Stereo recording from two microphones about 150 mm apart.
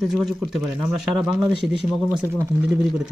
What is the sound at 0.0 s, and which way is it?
A man's voice, centre (ahead or behind).